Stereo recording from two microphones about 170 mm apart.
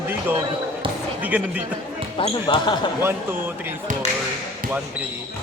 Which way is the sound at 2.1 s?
30° left (ahead or behind).